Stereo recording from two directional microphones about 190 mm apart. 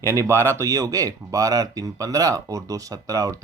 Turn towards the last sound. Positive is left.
turn(degrees=-15)  # may be behind; listen again after turning